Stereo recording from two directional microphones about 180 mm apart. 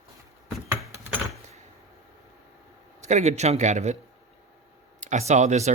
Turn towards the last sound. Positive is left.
turn(degrees=-40)  # may be behind; listen again after turning